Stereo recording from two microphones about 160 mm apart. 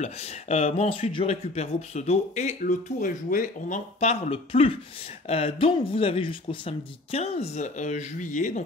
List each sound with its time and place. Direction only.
0.0 s speech: 40° left (ahead or behind)